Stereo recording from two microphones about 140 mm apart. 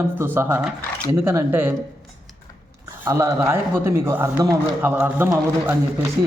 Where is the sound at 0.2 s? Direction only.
15° right (ahead or behind).